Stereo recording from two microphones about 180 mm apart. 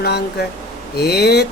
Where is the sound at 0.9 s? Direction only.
60° left (ahead or behind).